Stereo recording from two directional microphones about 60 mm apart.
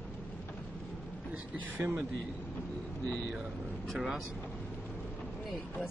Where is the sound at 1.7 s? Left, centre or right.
Right.